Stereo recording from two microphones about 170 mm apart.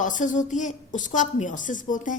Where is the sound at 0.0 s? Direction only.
50° left (ahead or behind).